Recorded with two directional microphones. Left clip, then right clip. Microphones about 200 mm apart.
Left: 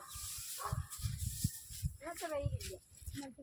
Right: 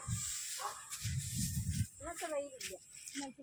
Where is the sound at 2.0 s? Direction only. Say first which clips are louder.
Even; 40° right (ahead or behind).